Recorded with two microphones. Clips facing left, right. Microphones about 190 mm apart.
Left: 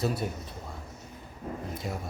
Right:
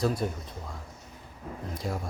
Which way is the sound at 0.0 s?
5° left (ahead or behind).